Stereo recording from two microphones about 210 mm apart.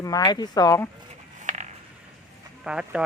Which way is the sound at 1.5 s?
35° right (ahead or behind).